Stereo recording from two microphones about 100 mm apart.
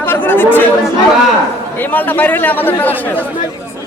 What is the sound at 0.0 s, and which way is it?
Chatter, 20° left (ahead or behind).